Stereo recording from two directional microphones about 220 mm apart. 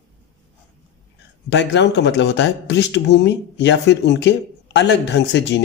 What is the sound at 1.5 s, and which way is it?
A man's voice, 50° left (ahead or behind).